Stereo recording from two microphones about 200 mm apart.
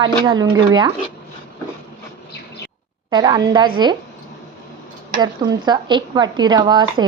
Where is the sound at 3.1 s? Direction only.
20° right (ahead or behind).